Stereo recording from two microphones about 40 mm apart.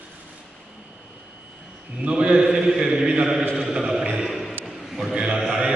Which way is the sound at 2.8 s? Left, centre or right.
Centre.